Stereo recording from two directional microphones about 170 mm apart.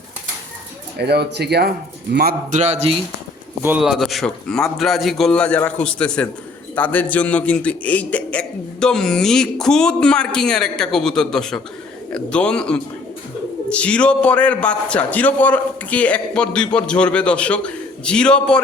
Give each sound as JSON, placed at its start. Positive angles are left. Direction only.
{"t": 0.9, "sound": "speech", "side_deg": -75}
{"t": 2.1, "sound": "a man's voice", "side_deg": -60}
{"t": 2.6, "sound": "speech", "side_deg": -40}
{"t": 3.6, "sound": "a man's voice", "side_deg": -5}